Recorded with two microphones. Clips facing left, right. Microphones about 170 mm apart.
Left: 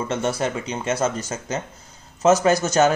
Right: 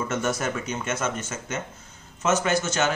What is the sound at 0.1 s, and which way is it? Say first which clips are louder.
A man's voice: left 5 dB; 30° left (ahead or behind).